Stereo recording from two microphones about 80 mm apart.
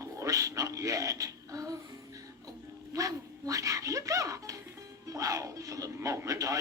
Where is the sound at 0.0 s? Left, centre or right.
Right.